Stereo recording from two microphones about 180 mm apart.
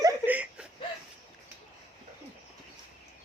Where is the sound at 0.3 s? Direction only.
5° right (ahead or behind).